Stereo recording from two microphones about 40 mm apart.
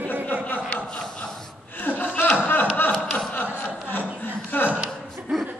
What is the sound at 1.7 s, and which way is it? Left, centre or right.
Chuckle, left.